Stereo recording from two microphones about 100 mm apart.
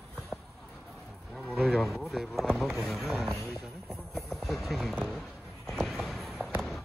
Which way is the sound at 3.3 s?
25° right (ahead or behind).